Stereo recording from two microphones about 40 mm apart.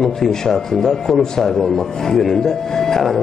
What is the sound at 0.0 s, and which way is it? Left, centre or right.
A man's voice, centre.